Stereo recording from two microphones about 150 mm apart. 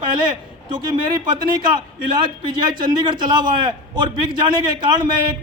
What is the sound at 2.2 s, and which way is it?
A man's voice, 30° right (ahead or behind).